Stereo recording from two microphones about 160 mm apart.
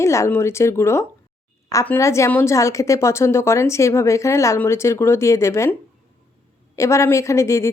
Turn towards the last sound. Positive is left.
turn(degrees=20)  # may be behind; listen again after turning